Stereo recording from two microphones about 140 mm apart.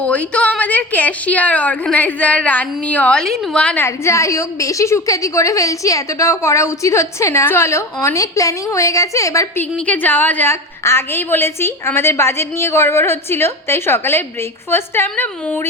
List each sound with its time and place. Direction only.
0.0 s a woman's voice: 10° left (ahead or behind)
3.8 s a woman's voice: 20° left (ahead or behind)
9.7 s a woman's voice: 10° left (ahead or behind)